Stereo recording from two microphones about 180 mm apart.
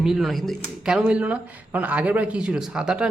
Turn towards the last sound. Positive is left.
turn(degrees=-5)  # may be behind; listen again after turning